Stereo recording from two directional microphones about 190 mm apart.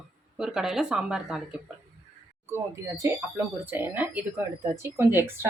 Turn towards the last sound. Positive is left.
turn(degrees=-15)  # may be behind; listen again after turning